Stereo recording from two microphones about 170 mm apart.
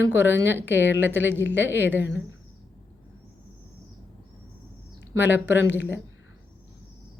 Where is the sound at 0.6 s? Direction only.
90° left.